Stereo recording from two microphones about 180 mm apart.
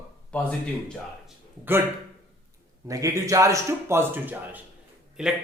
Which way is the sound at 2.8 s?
15° right (ahead or behind).